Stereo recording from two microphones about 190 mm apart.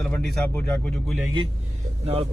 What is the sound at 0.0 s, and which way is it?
Speech, 5° left (ahead or behind).